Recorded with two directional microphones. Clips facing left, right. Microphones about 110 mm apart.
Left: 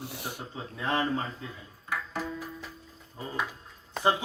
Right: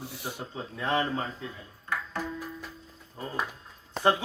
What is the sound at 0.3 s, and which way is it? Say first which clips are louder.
Speech: right 2 dB; centre (ahead or behind).